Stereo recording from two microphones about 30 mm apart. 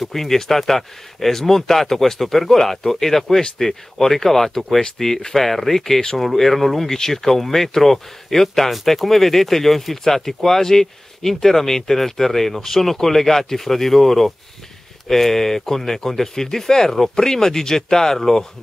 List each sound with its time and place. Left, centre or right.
0.1 s speech: centre